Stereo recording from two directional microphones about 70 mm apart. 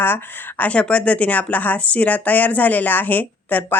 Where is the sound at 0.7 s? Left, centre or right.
Centre.